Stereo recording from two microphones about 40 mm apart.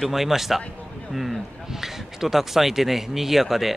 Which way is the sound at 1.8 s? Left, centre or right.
Centre.